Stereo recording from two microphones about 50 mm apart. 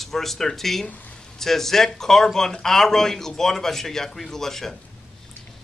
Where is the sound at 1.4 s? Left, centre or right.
Centre.